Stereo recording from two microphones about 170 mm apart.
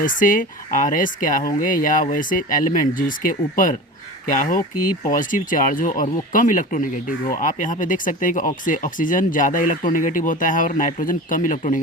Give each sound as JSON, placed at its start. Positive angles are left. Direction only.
{"t": 0.0, "sound": "speech", "side_deg": 50}